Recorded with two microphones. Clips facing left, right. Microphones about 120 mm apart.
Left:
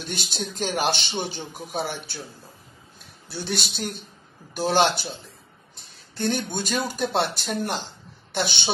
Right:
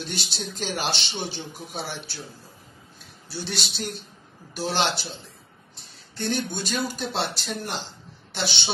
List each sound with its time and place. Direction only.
0.0 s speech: 50° left (ahead or behind)
3.3 s speech: 50° left (ahead or behind)
6.1 s a woman's voice: 50° left (ahead or behind)